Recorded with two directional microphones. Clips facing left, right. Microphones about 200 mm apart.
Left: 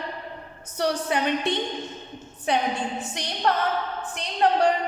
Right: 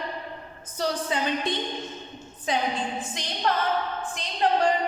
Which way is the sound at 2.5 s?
65° left (ahead or behind).